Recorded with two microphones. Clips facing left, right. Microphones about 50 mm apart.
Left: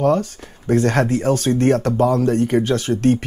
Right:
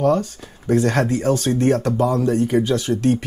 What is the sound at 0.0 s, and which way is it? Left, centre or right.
Speech, left.